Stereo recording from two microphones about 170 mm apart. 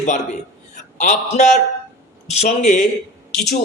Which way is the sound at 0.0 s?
45° left (ahead or behind).